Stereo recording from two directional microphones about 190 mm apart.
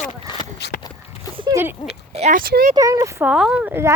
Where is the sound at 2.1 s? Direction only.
35° right (ahead or behind).